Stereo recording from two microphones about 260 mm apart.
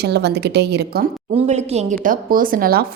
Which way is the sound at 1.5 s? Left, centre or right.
Right.